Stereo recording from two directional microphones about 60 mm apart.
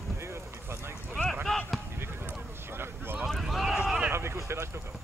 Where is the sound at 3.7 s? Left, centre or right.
Centre.